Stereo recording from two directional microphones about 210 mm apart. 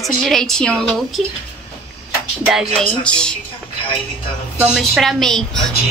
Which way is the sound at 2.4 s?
Centre (ahead or behind).